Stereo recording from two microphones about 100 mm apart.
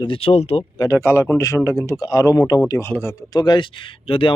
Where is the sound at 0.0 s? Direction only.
65° left (ahead or behind).